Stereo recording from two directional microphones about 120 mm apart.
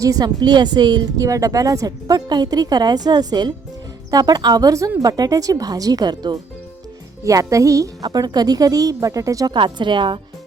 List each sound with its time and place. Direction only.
0.0 s a woman's voice: 30° right (ahead or behind)
9.6 s speech: 40° right (ahead or behind)